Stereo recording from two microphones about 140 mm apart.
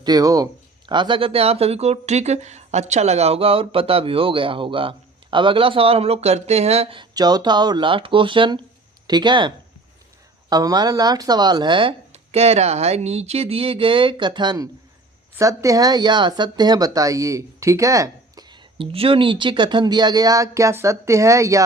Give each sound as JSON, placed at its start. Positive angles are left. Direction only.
{"t": 0.0, "sound": "speech", "side_deg": -25}
{"t": 7.0, "sound": "speech", "side_deg": -30}
{"t": 10.5, "sound": "speech", "side_deg": -30}
{"t": 18.8, "sound": "speech", "side_deg": -40}